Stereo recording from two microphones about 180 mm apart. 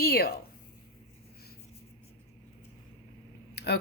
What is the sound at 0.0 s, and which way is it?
Speech, 60° left (ahead or behind).